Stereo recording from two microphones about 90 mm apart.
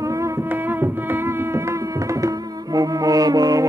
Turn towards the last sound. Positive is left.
turn(degrees=-45)  # may be behind; listen again after turning